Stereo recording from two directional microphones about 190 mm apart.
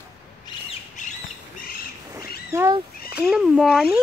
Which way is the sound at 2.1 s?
15° right (ahead or behind).